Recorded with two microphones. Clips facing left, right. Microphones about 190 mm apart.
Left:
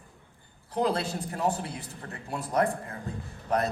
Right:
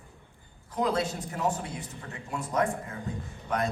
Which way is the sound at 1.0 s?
35° left (ahead or behind).